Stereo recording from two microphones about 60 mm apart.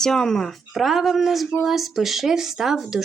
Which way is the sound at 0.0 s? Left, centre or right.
Centre.